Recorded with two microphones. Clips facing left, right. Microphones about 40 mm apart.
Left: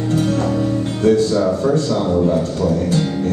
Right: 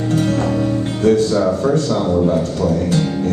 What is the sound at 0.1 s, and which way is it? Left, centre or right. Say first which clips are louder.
Music: right 1 dB; right.